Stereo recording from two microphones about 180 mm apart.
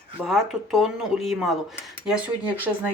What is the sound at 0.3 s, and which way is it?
Speech, centre (ahead or behind).